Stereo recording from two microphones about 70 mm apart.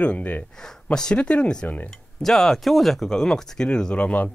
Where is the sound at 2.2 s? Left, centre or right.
Centre; by 4.3 s left.